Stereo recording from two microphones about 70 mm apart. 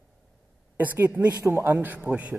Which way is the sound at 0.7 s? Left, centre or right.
Right.